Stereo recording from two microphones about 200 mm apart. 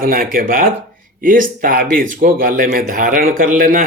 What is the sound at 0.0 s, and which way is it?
Speech, 45° right (ahead or behind).